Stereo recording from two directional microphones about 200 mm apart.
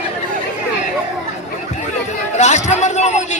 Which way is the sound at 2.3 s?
35° left (ahead or behind).